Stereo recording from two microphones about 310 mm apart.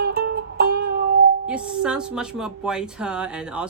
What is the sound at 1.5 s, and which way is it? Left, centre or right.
Speech, centre.